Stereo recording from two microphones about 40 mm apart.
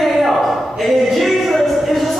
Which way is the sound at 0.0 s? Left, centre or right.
Centre.